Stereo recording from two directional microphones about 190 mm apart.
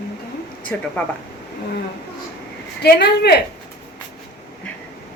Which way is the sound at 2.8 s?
60° left (ahead or behind).